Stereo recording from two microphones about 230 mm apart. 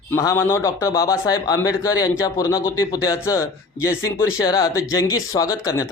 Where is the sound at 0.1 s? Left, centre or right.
Centre.